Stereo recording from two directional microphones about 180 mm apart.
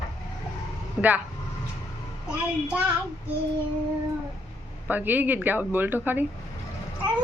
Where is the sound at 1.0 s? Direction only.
5° right (ahead or behind).